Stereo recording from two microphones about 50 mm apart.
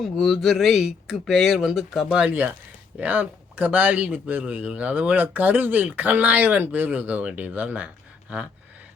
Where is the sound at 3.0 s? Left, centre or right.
Right.